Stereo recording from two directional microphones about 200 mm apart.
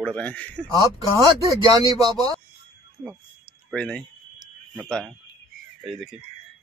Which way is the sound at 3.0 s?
5° left (ahead or behind).